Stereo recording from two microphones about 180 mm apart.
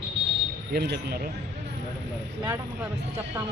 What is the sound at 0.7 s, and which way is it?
Speech, 65° right (ahead or behind).